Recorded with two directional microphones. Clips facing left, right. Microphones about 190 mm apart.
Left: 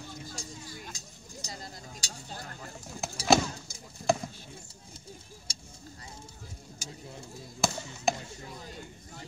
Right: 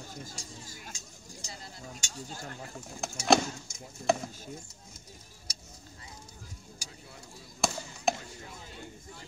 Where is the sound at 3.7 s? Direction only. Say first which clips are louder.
Right 2 dB; 35° left (ahead or behind).